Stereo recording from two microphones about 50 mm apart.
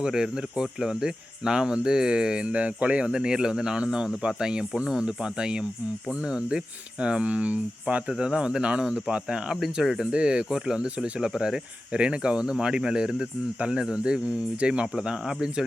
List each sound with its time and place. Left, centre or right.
0.0 s speech: centre